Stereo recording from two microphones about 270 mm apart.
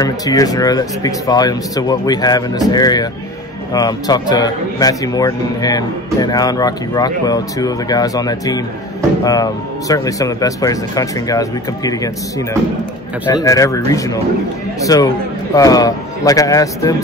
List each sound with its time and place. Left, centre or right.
0.0 s a man's voice: centre